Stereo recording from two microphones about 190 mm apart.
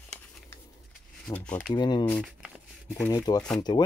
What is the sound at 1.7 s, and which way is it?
Speech, 25° left (ahead or behind).